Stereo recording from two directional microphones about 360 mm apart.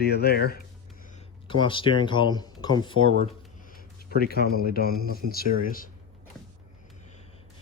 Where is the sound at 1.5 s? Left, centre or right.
Centre.